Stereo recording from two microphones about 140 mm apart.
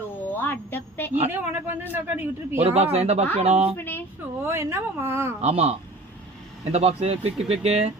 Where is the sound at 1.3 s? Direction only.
15° right (ahead or behind).